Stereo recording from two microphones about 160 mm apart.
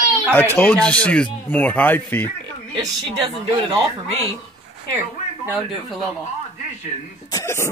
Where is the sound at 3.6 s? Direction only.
35° right (ahead or behind).